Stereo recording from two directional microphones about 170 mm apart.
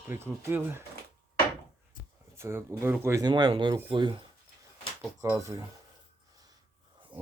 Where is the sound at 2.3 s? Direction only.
15° right (ahead or behind).